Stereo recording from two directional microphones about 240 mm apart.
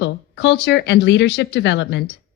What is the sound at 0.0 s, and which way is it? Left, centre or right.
Speech, left.